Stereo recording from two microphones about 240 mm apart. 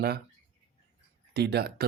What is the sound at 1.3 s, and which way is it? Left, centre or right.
Speech, right.